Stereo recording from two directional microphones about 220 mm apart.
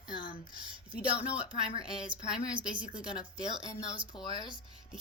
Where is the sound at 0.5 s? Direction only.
20° right (ahead or behind).